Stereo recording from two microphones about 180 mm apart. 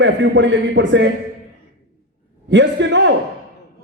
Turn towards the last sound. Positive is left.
turn(degrees=-85)